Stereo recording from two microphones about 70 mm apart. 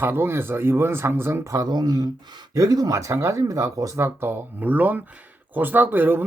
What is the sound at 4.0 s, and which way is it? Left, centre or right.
Speech, right.